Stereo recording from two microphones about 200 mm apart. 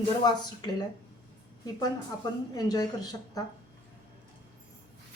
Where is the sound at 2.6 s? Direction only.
20° left (ahead or behind).